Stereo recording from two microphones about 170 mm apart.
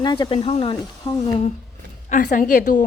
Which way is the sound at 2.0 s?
45° left (ahead or behind).